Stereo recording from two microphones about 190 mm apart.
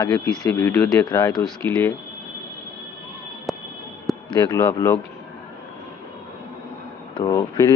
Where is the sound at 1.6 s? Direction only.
10° left (ahead or behind).